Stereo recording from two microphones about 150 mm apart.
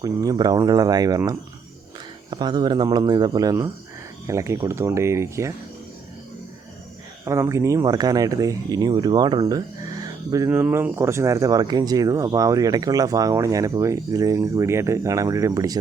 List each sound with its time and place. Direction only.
0.0 s speech: 25° right (ahead or behind)
7.3 s speech: 20° right (ahead or behind)